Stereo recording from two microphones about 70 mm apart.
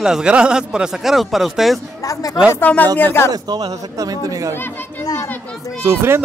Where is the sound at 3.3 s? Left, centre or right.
Right.